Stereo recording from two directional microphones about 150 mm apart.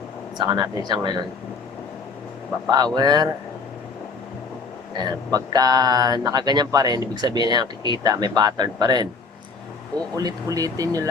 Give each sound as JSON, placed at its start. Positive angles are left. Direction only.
{"t": 0.3, "sound": "speech", "side_deg": -25}
{"t": 2.6, "sound": "speech", "side_deg": -25}
{"t": 4.9, "sound": "speech", "side_deg": -25}
{"t": 10.2, "sound": "speech", "side_deg": -25}